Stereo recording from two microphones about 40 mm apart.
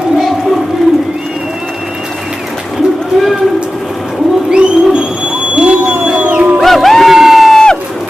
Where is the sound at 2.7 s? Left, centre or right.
Centre.